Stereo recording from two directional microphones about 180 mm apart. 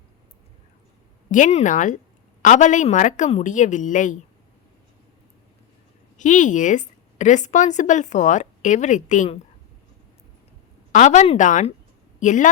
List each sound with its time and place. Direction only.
1.3 s a woman's voice: 40° left (ahead or behind)
6.1 s a woman's voice: 45° left (ahead or behind)
10.9 s a woman's voice: 40° left (ahead or behind)